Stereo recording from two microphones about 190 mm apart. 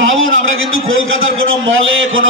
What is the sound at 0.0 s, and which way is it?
A man's voice, 90° right.